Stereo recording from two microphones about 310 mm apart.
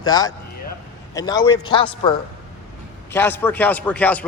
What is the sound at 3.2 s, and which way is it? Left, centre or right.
Speech, centre.